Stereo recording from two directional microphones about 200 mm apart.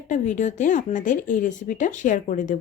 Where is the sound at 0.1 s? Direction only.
40° left (ahead or behind).